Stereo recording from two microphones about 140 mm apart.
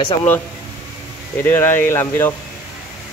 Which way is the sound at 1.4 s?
15° left (ahead or behind).